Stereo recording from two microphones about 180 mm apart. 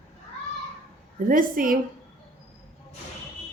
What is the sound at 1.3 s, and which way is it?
Speech, 50° right (ahead or behind).